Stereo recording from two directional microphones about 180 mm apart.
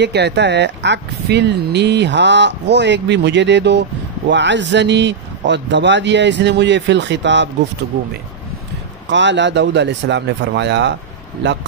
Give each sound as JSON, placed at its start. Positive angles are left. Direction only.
{"t": 0.0, "sound": "speech", "side_deg": -70}
{"t": 9.1, "sound": "speech", "side_deg": -85}